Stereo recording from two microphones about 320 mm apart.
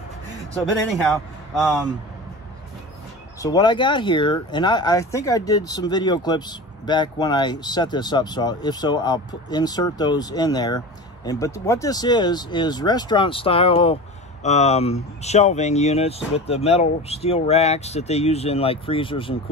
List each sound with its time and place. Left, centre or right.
1.0 s speech: centre
3.3 s speech: centre